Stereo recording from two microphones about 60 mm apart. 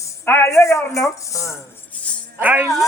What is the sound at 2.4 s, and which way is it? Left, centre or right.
Speech, right.